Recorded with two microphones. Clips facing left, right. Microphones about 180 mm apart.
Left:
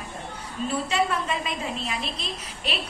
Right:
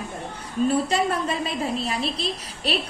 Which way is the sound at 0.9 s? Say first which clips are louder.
Right 2 dB; 40° right (ahead or behind).